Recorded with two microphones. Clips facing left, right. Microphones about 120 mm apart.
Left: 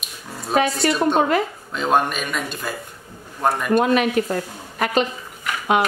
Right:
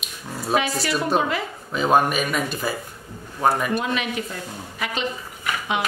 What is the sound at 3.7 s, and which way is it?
A woman's voice, 50° left (ahead or behind).